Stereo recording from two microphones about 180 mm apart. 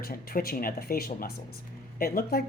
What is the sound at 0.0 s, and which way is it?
Speech, 55° left (ahead or behind).